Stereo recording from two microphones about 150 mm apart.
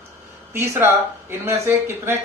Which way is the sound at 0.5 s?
15° right (ahead or behind).